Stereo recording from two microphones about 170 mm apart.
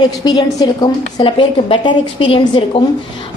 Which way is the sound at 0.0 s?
25° left (ahead or behind).